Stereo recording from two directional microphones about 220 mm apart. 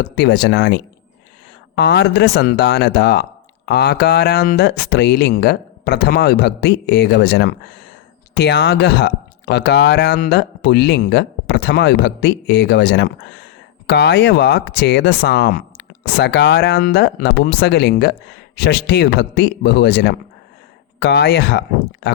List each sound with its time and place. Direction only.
0.0 s speech: 50° left (ahead or behind)